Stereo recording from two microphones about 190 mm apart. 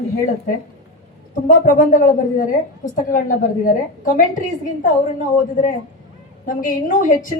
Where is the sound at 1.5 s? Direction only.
45° left (ahead or behind).